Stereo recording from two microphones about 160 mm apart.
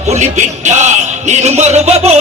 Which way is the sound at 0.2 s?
45° right (ahead or behind).